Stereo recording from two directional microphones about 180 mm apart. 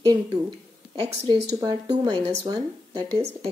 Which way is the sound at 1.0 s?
25° right (ahead or behind).